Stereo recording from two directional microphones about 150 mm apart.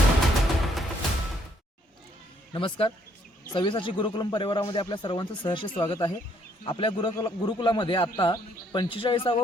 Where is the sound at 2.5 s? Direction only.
35° left (ahead or behind).